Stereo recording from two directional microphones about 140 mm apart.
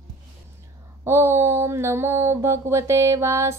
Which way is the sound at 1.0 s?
20° right (ahead or behind).